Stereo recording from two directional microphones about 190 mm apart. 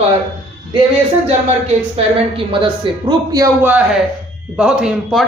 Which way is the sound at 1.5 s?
35° right (ahead or behind).